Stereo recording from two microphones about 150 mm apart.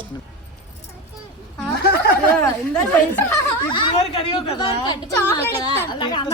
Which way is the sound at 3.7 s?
30° left (ahead or behind).